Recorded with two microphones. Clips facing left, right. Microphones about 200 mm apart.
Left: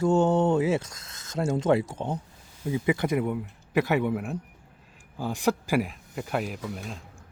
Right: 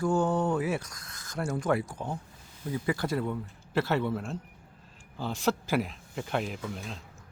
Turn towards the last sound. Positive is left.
turn(degrees=5)  # may be behind; listen again after turning